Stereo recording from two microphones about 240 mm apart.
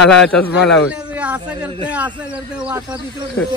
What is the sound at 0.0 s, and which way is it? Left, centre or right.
Speech, centre.